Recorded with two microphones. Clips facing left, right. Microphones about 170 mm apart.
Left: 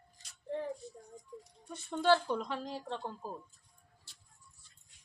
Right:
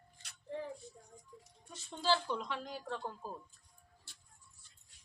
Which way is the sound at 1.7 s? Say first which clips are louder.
Left 6 dB; 55° left (ahead or behind).